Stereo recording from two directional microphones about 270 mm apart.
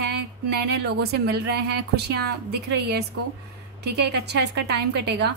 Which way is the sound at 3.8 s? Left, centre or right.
Right.